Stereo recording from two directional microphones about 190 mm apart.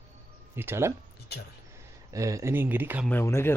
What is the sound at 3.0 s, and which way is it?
Speech, 10° left (ahead or behind).